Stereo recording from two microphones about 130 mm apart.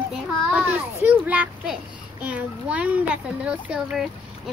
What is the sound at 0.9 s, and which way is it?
A child's voice, 15° right (ahead or behind).